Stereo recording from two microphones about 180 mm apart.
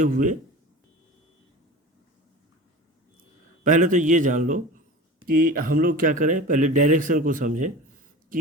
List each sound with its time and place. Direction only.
0.0 s speech: 45° right (ahead or behind)
3.6 s speech: 45° right (ahead or behind)